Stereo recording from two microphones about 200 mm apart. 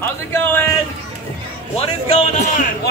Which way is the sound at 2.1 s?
35° left (ahead or behind).